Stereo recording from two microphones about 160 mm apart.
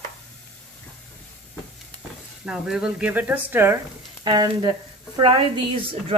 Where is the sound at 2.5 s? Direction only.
5° right (ahead or behind).